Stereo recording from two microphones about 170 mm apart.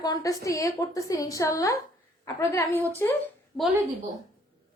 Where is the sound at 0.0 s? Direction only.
20° left (ahead or behind).